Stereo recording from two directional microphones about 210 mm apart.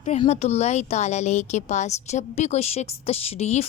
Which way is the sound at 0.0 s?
30° left (ahead or behind).